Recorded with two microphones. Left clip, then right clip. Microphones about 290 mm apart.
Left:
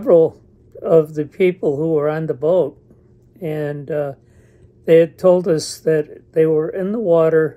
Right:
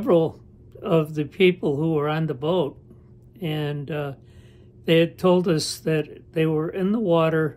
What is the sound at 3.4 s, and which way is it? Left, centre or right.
Speech, centre.